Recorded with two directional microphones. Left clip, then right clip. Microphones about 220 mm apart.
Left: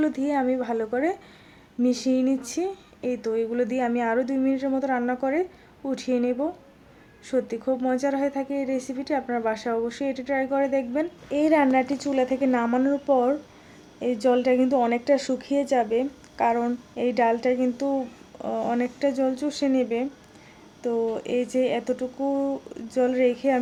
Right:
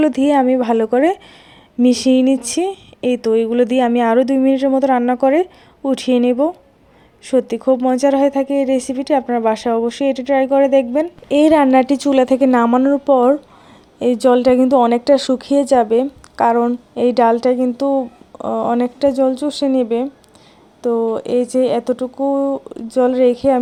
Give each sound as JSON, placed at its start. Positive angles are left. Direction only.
{"t": 0.0, "sound": "speech", "side_deg": -35}